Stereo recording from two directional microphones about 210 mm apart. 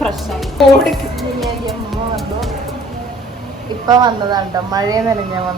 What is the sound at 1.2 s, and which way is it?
Music, centre (ahead or behind).